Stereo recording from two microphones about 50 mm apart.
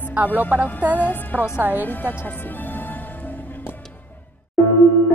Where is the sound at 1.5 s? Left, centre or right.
Right.